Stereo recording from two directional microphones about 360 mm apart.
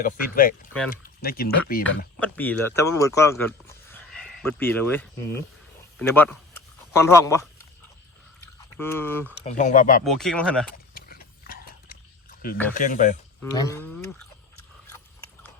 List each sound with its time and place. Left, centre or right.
0.0 s speech: left
2.1 s speech: centre
8.8 s speech: centre
9.4 s speech: centre
10.0 s speech: centre
10.9 s a sound: left
12.7 s speech: left
13.4 s speech: centre